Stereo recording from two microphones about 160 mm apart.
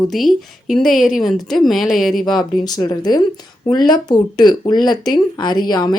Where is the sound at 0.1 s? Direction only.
Centre (ahead or behind).